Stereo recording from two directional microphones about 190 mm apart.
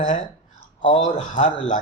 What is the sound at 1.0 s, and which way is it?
Speech, 40° left (ahead or behind).